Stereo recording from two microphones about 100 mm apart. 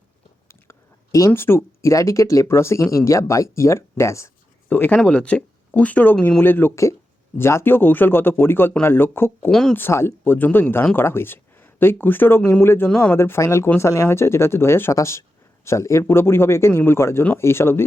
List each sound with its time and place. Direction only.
0.4 s speech: 30° left (ahead or behind)
4.7 s speech: 15° left (ahead or behind)
9.5 s speech: 5° left (ahead or behind)
9.7 s speech: 25° left (ahead or behind)
12.9 s speech: 10° left (ahead or behind)
13.1 s speech: 25° left (ahead or behind)